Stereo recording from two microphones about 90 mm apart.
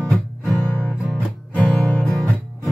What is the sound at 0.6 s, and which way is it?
Music, 20° left (ahead or behind).